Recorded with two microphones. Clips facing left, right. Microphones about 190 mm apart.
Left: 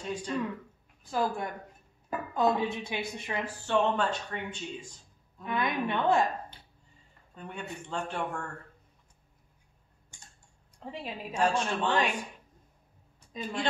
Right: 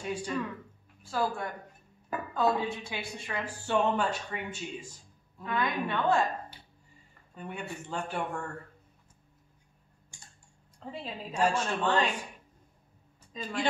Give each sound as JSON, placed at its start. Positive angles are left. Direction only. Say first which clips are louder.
{"t": 0.0, "sound": "speech", "louder": "right 1 dB", "side_deg": -10}
{"t": 1.0, "sound": "a woman's voice", "louder": "left 1 dB", "side_deg": 15}
{"t": 3.4, "sound": "speech", "louder": "even", "side_deg": -10}
{"t": 5.4, "sound": "a woman's voice", "louder": "left 1 dB", "side_deg": 15}
{"t": 7.3, "sound": "speech", "louder": "right 1 dB", "side_deg": -5}
{"t": 10.8, "sound": "a woman's voice", "louder": "left 1 dB", "side_deg": 10}
{"t": 11.3, "sound": "speech", "louder": "even", "side_deg": -10}
{"t": 11.6, "sound": "a woman's voice", "louder": "even", "side_deg": 10}
{"t": 13.3, "sound": "speech", "louder": "left 2 dB", "side_deg": 10}